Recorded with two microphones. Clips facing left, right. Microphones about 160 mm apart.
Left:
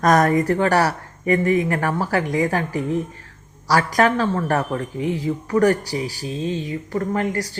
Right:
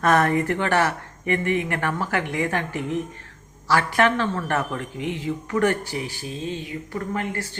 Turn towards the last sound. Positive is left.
turn(degrees=40)  # may be behind; listen again after turning